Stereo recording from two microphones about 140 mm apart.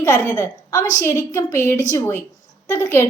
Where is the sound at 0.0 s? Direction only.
20° left (ahead or behind).